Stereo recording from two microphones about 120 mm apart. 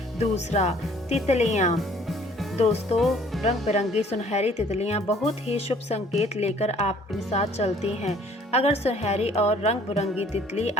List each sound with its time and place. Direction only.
0.2 s speech: 65° left (ahead or behind)
3.0 s speech: centre (ahead or behind)
3.4 s speech: 65° left (ahead or behind)